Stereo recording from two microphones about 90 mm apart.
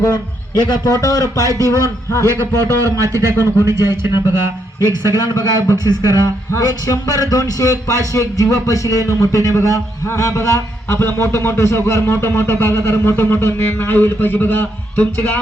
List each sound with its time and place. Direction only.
0.5 s a man's voice: 45° left (ahead or behind)
2.2 s a man's voice: 30° right (ahead or behind)
5.1 s a man's voice: 45° left (ahead or behind); by 15.4 s 20° left (ahead or behind)